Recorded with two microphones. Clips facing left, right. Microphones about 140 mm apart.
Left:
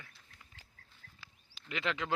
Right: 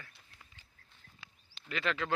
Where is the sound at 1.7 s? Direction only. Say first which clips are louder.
Right 1 dB; 20° left (ahead or behind).